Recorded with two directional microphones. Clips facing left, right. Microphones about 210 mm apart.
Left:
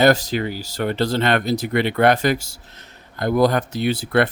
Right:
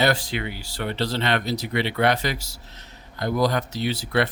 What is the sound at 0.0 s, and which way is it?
Speech, 40° left (ahead or behind).